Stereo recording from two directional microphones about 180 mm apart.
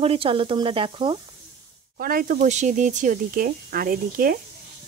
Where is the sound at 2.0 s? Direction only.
55° right (ahead or behind).